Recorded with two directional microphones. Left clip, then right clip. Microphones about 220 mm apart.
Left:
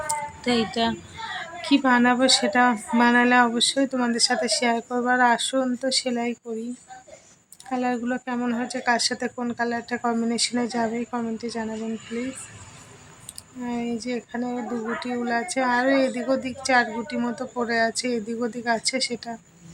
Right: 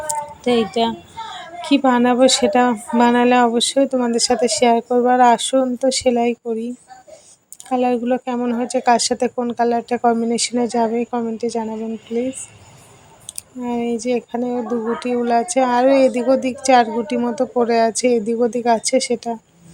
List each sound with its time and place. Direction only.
0.1 s a sound: 15° right (ahead or behind)
1.6 s speech: 15° right (ahead or behind)
7.7 s speech: 20° right (ahead or behind)
13.2 s speech: 20° right (ahead or behind)